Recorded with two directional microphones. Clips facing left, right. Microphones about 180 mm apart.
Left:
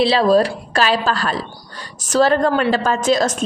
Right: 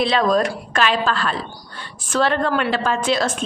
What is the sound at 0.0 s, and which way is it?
A woman's voice, 30° left (ahead or behind).